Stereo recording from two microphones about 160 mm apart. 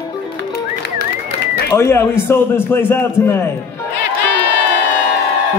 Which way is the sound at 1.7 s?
15° left (ahead or behind).